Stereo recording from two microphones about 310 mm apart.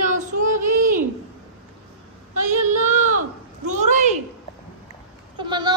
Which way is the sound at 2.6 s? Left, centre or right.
Right.